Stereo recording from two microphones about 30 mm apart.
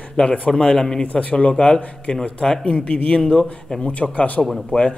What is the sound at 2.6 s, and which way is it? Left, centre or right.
Speech, left.